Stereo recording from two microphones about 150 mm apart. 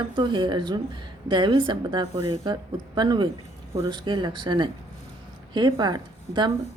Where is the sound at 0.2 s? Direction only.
30° right (ahead or behind).